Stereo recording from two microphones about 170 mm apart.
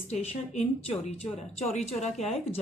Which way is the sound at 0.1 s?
40° left (ahead or behind).